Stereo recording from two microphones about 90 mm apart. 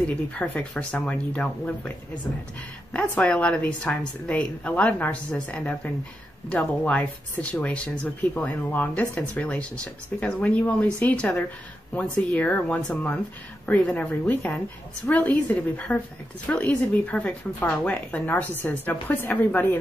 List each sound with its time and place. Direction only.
0.0 s a woman's voice: 15° left (ahead or behind)
2.9 s a woman's voice: 15° left (ahead or behind)